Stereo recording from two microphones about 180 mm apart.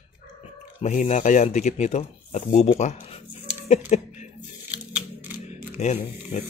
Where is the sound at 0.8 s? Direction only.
40° left (ahead or behind).